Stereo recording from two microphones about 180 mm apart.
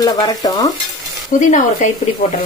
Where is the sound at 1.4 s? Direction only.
45° left (ahead or behind).